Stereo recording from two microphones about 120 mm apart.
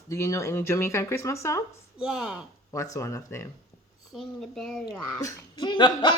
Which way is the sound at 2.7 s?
25° left (ahead or behind).